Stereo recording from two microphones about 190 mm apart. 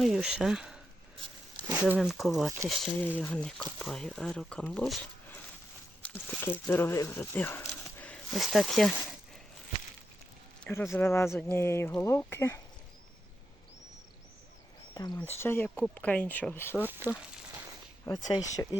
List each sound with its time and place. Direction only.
0.0 s speech: centre (ahead or behind)
1.8 s speech: 5° right (ahead or behind)
7.9 s a sound: 5° left (ahead or behind)
10.6 s a sound: 10° left (ahead or behind)
10.9 s speech: 10° left (ahead or behind)
14.9 s speech: 20° left (ahead or behind)
18.0 s speech: 20° left (ahead or behind)